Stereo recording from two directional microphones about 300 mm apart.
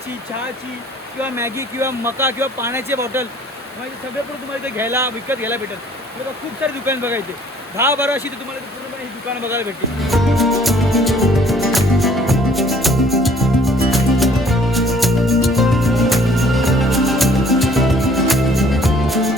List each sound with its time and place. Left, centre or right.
1.2 s speech: centre
4.6 s speech: centre
6.8 s speech: centre
10.1 s music: centre